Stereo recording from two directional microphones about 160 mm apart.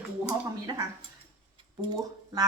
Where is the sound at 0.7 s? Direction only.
20° right (ahead or behind).